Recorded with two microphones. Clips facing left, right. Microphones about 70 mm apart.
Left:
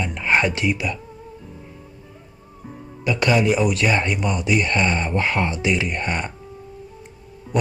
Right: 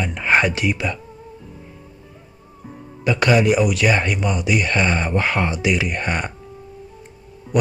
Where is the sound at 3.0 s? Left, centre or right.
Right.